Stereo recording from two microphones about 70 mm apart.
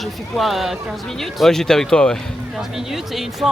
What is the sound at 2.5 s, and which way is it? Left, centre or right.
Speech, centre.